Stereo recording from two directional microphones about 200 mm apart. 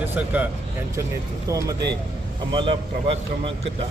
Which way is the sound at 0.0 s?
10° right (ahead or behind).